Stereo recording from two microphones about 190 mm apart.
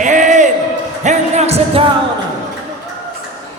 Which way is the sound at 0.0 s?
40° right (ahead or behind).